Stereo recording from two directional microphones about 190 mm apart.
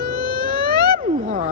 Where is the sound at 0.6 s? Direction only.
25° left (ahead or behind).